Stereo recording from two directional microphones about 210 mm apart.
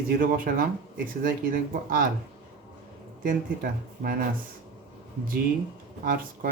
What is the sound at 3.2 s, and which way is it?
Speech, 45° right (ahead or behind).